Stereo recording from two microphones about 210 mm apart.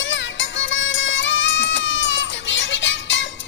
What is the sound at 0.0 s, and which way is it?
Music, 60° left (ahead or behind).